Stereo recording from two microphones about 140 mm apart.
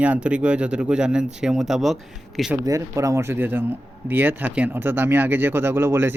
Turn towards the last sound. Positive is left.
turn(degrees=-15)  # may be behind; listen again after turning